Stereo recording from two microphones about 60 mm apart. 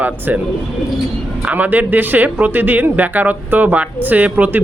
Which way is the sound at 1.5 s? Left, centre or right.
Right.